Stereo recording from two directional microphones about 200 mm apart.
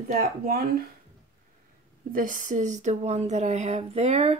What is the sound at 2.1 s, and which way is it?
Speech, 40° right (ahead or behind).